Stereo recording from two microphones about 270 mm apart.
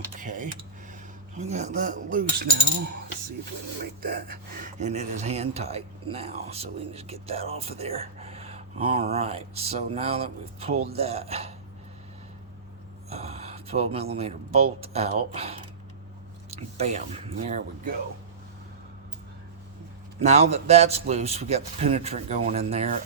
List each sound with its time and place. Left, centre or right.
0.2 s speech: right
4.0 s speech: right
13.1 s speech: right
20.1 s speech: right